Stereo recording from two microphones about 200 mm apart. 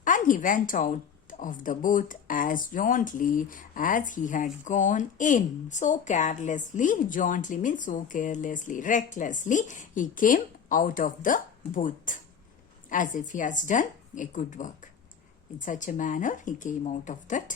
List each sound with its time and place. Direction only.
0.0 s speech: 40° left (ahead or behind)